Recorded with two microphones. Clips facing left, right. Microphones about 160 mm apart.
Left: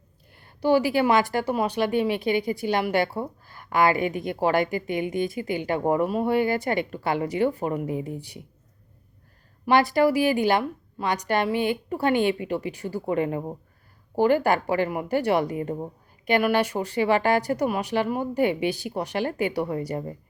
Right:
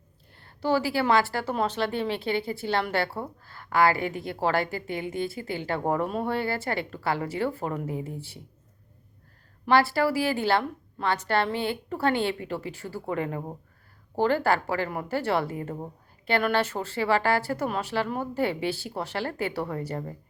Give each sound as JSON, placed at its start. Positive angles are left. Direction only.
{"t": 0.3, "sound": "a woman's voice", "side_deg": 15}
{"t": 9.6, "sound": "a woman's voice", "side_deg": 20}